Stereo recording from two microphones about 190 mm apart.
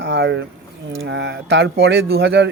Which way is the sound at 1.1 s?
70° right (ahead or behind).